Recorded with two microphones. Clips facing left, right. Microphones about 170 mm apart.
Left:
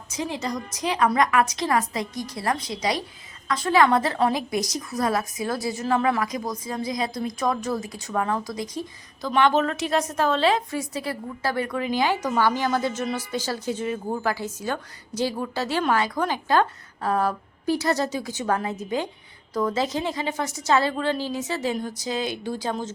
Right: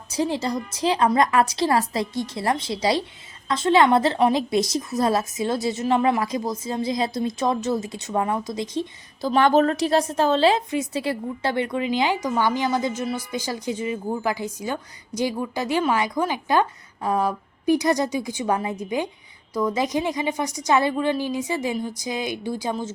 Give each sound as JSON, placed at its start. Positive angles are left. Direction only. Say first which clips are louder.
{"t": 0.1, "sound": "a woman's voice", "louder": "right 5 dB", "side_deg": -30}